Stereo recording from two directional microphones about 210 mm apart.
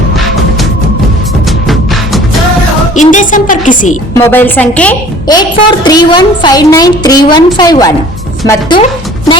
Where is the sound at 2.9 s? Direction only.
35° left (ahead or behind).